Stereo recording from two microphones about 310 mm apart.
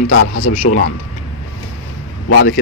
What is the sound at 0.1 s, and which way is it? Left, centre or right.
Speech, left.